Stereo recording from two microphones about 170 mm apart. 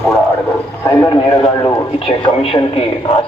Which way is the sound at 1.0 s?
25° left (ahead or behind).